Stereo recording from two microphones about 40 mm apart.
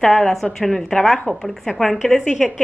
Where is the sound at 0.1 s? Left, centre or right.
Centre.